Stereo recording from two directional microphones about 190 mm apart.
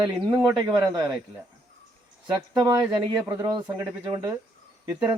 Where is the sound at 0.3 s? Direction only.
15° right (ahead or behind).